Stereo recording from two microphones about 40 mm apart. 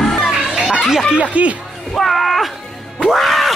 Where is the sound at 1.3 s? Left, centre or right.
Right.